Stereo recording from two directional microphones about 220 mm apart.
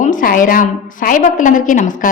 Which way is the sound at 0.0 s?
35° left (ahead or behind).